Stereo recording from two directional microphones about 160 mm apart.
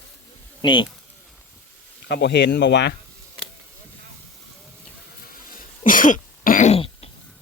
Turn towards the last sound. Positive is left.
turn(degrees=50)  # may be behind; listen again after turning